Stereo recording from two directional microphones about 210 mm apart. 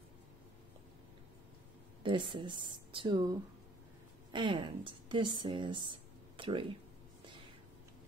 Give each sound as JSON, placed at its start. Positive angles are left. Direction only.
{"t": 2.0, "sound": "a woman's voice", "side_deg": -20}